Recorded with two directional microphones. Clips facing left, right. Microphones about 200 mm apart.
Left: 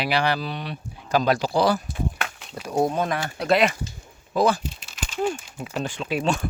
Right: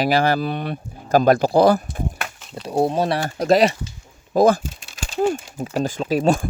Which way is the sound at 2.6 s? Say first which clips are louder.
Right 3 dB; 30° right (ahead or behind).